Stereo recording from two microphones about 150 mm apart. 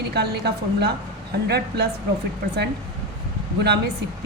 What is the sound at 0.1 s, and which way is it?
A woman's voice, 90° right.